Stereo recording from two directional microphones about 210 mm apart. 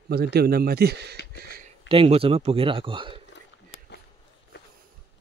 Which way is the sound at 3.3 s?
55° left (ahead or behind).